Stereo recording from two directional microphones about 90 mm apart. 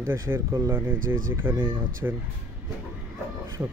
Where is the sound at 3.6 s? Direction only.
30° right (ahead or behind).